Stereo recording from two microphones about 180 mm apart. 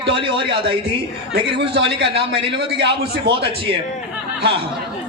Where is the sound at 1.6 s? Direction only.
75° right (ahead or behind).